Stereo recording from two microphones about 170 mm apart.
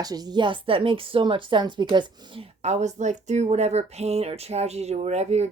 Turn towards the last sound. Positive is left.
turn(degrees=-40)  # may be behind; listen again after turning